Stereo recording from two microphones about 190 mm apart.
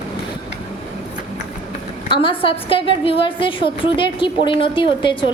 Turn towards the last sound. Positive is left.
turn(degrees=25)  # may be behind; listen again after turning